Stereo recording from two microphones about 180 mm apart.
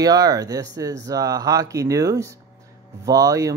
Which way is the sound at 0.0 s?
20° right (ahead or behind).